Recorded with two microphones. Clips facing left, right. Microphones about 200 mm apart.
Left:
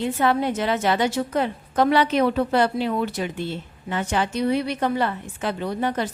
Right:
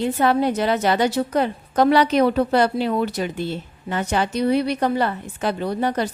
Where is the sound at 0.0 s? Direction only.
40° right (ahead or behind).